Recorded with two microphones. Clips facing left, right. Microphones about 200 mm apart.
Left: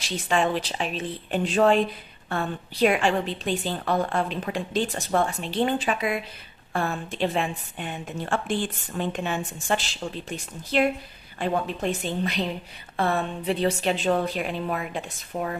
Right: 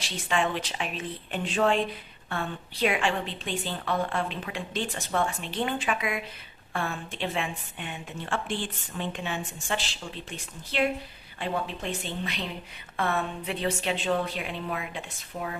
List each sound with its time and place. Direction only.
0.3 s a woman's voice: 35° left (ahead or behind)